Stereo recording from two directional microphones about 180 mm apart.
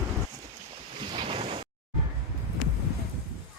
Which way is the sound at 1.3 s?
30° right (ahead or behind).